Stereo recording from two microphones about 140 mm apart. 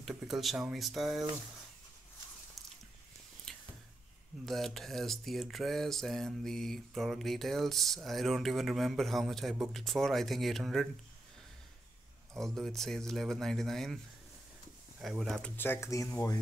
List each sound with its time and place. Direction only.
0.0 s speech: centre (ahead or behind)
3.5 s a sound: 5° left (ahead or behind)
4.5 s speech: centre (ahead or behind)
12.4 s speech: centre (ahead or behind)
15.0 s speech: centre (ahead or behind); by 16.3 s 20° left (ahead or behind)